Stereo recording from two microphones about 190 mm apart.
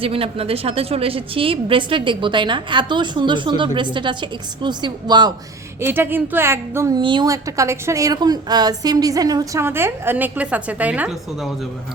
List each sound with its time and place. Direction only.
0.0 s a woman's voice: 30° right (ahead or behind)
5.8 s a woman's voice: 10° right (ahead or behind)